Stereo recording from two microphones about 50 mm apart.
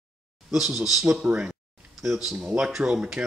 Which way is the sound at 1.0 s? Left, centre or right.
Centre.